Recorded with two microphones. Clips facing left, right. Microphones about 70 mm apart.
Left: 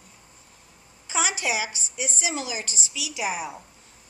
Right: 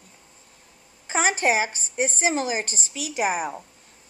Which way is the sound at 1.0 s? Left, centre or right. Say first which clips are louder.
Right 5 dB; right.